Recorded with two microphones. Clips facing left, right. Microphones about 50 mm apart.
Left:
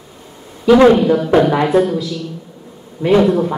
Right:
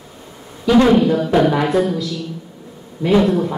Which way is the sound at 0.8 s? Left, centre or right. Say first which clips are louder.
Left 3 dB; centre.